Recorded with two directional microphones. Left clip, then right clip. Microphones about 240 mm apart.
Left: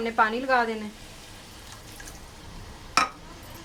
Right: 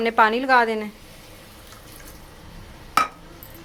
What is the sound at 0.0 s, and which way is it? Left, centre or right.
Speech, right.